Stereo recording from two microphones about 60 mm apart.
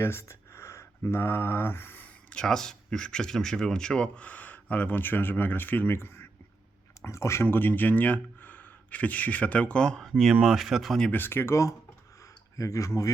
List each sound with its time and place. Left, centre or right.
0.0 s a sound: left
1.0 s mantra: left
2.0 s speech: centre; by 7.4 s left
7.4 s speech: left
10.0 s speech: centre
11.1 s mantra: left
12.2 s a sound: left